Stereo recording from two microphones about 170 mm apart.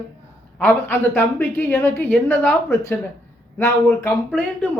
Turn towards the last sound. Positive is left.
turn(degrees=10)  # may be behind; listen again after turning